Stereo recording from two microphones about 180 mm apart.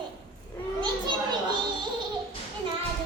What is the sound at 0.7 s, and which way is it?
Speech, 25° right (ahead or behind).